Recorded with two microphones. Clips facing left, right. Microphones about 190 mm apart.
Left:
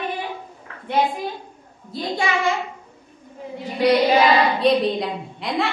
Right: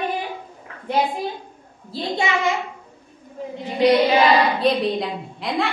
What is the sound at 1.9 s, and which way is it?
Speech, 30° right (ahead or behind).